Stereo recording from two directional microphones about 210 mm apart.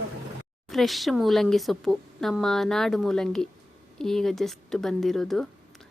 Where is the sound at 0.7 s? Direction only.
Centre (ahead or behind).